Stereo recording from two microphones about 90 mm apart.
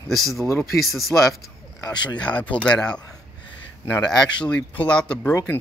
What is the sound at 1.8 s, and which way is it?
Speech, 55° left (ahead or behind).